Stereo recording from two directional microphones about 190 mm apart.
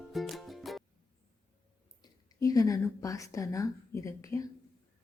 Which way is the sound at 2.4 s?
20° left (ahead or behind).